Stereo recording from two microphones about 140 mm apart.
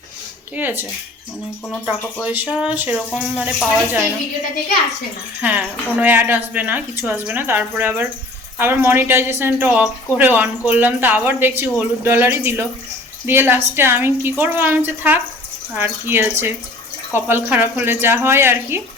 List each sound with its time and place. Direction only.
0.5 s a woman's voice: 15° right (ahead or behind)
2.2 s a woman's voice: 10° right (ahead or behind)
5.4 s a woman's voice: 10° right (ahead or behind)